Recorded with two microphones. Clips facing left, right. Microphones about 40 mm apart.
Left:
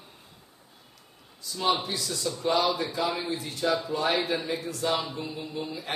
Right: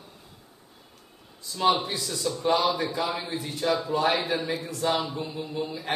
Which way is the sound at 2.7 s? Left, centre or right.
Right.